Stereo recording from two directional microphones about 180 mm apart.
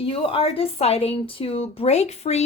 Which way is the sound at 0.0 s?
30° left (ahead or behind).